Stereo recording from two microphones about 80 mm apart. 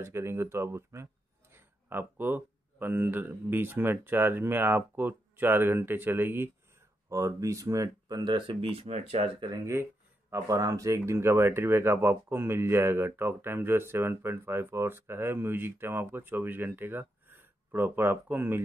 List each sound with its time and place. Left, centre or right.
0.0 s speech: right
7.1 s speech: right
8.2 s speech: right
10.3 s speech: right